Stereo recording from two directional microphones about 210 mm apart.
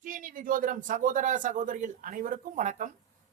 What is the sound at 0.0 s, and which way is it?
Speech, 40° right (ahead or behind).